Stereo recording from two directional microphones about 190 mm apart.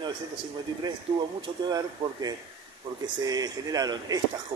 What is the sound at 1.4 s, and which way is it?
Speech, 20° right (ahead or behind).